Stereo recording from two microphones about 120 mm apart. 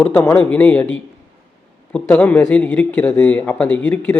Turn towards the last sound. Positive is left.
turn(degrees=15)  # may be behind; listen again after turning